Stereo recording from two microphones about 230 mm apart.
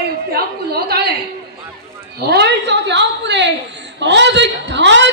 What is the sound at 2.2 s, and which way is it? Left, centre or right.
A woman's voice, right.